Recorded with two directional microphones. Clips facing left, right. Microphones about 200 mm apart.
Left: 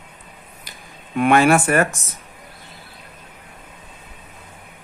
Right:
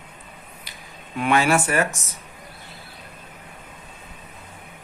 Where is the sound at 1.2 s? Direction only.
55° left (ahead or behind).